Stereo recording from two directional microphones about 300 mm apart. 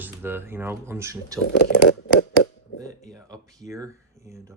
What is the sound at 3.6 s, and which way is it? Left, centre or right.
Speech, centre.